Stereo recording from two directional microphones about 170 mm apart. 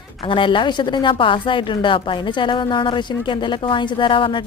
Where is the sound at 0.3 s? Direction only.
30° left (ahead or behind).